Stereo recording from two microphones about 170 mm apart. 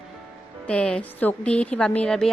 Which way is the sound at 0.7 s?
5° left (ahead or behind).